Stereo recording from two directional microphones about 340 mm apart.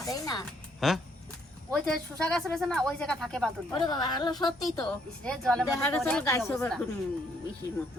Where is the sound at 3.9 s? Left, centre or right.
Centre.